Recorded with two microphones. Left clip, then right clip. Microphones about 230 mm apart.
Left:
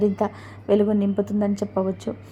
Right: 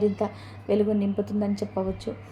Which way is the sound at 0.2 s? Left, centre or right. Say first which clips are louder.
Left 4 dB; left.